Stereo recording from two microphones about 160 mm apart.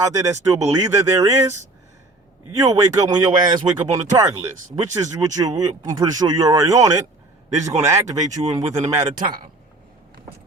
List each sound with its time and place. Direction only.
0.0 s speech: 20° right (ahead or behind)
2.6 s speech: 20° right (ahead or behind)